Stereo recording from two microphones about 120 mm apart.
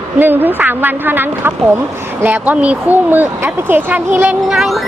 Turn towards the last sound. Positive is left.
turn(degrees=0)  # may be behind; listen again after turning